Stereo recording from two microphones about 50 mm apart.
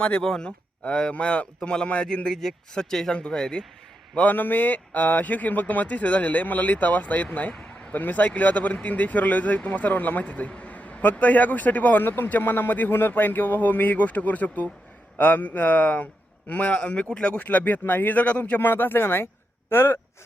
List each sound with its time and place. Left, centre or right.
0.2 s speech: centre
0.9 s speech: left
4.3 s speech: left
7.5 s a sound: centre
7.9 s speech: left
12.0 s speech: left
18.6 s speech: left